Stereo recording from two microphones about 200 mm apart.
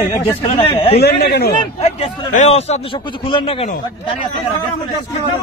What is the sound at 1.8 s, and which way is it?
A man's voice, 30° left (ahead or behind).